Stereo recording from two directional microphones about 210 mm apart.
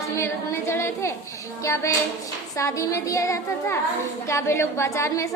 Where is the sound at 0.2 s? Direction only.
10° left (ahead or behind).